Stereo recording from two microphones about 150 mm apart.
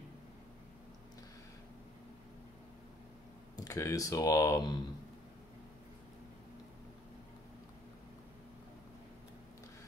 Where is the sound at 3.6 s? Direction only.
20° left (ahead or behind).